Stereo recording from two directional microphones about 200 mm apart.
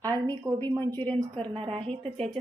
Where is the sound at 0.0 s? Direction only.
20° right (ahead or behind).